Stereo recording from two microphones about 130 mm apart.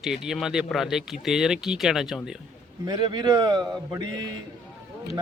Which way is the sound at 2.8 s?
35° right (ahead or behind).